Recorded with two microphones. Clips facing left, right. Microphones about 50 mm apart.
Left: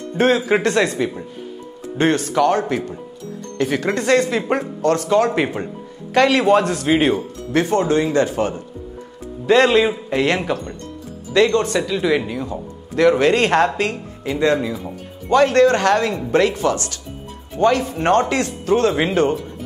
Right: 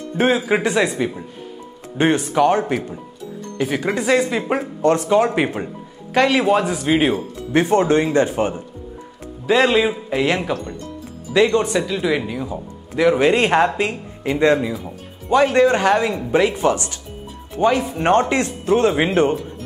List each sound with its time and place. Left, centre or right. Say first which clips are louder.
0.2 s a man's voice: left 1 dB; centre
4.8 s a man's voice: right 1 dB; centre
7.5 s speech: right 1 dB; right
9.5 s a man's voice: left 2 dB; centre
11.3 s speech: even; centre
14.2 s speech: right 2 dB; right
14.7 s speech: left 1 dB; centre